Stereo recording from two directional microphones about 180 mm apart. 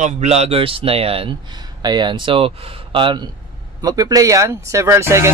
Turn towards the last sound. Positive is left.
turn(degrees=-15)  # may be behind; listen again after turning